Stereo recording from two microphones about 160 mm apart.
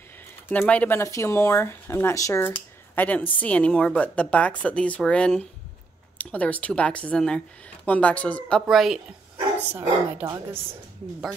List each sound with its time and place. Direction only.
0.5 s speech: 10° left (ahead or behind)
9.8 s a woman's voice: 15° right (ahead or behind)